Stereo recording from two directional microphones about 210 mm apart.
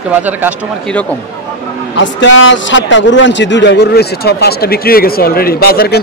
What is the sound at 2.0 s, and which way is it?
A man's voice, 60° left (ahead or behind).